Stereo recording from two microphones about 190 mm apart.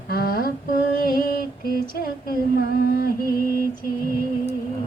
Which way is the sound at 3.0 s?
50° left (ahead or behind).